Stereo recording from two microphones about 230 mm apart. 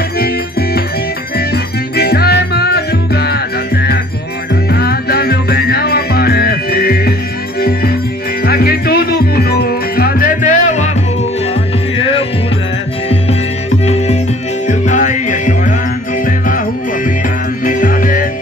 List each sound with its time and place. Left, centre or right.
0.2 s music: left
8.4 s music: left
12.0 s music: left
13.8 s music: left